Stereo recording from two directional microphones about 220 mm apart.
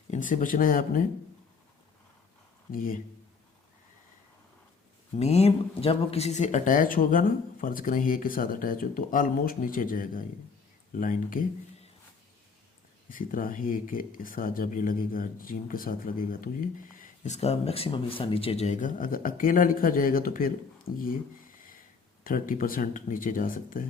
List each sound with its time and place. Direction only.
0.1 s speech: 35° left (ahead or behind)
2.7 s speech: 40° left (ahead or behind)
5.1 s speech: 30° left (ahead or behind)
13.1 s speech: 40° left (ahead or behind)
21.0 s a sound: 40° left (ahead or behind)
22.2 s speech: 40° left (ahead or behind)